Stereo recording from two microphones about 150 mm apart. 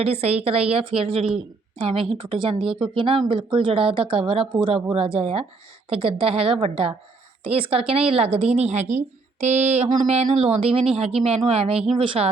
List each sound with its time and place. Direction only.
0.0 s speech: 45° right (ahead or behind)